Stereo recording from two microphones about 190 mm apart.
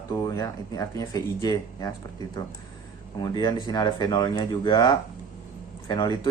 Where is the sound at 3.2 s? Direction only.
20° left (ahead or behind).